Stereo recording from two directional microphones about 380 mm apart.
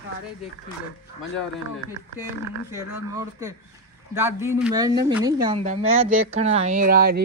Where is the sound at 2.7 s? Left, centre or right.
Centre; by 7.2 s right.